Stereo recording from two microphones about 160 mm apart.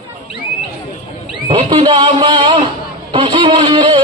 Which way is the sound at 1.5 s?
35° right (ahead or behind).